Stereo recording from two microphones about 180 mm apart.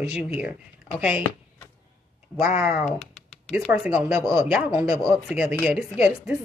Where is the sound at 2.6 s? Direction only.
Centre (ahead or behind).